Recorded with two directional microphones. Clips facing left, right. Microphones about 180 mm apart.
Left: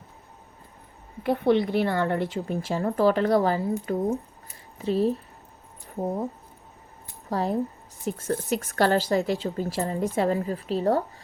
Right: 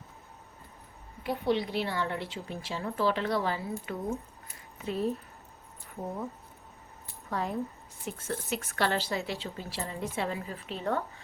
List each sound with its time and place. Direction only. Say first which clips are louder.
1.2 s a woman's voice: left 7 dB; 60° left (ahead or behind); by 6.2 s 35° left (ahead or behind)
7.3 s a woman's voice: left 7 dB; 35° left (ahead or behind)